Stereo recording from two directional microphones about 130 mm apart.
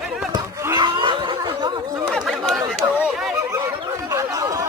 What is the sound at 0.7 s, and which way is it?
Snicker, 35° right (ahead or behind).